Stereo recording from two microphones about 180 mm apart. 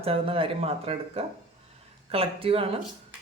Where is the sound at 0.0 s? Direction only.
30° right (ahead or behind).